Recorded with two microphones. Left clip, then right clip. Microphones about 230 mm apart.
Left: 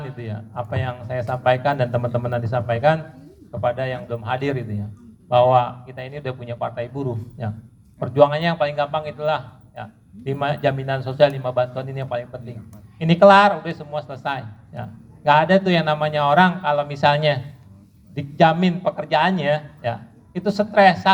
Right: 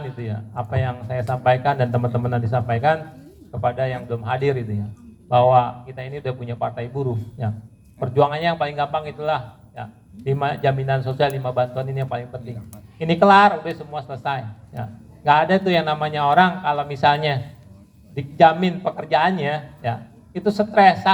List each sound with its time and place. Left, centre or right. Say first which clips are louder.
0.2 s a man's voice: even; left